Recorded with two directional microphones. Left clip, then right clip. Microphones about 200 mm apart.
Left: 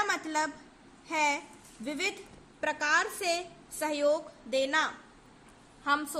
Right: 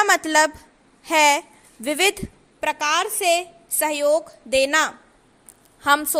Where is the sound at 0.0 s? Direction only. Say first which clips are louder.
Right 13 dB; 45° right (ahead or behind).